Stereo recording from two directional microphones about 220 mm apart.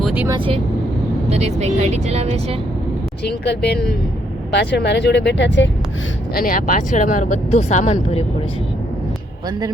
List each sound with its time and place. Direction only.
0.0 s vehicle: 5° right (ahead or behind)
0.3 s speech: 25° right (ahead or behind)
3.2 s speech: 50° left (ahead or behind)
6.3 s speech: 40° left (ahead or behind)